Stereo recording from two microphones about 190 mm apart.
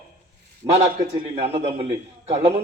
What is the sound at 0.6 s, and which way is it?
A man's voice, 25° right (ahead or behind).